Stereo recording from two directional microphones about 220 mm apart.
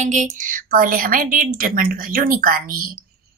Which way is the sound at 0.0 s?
35° right (ahead or behind).